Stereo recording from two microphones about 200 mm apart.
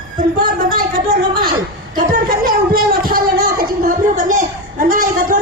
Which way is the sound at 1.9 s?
45° right (ahead or behind).